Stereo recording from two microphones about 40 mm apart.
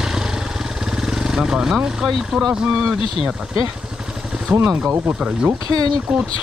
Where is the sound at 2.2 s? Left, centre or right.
Centre.